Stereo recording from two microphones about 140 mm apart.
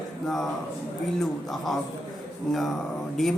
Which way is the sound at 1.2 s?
Centre (ahead or behind).